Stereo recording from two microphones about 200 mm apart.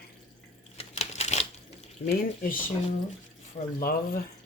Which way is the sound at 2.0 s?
45° left (ahead or behind).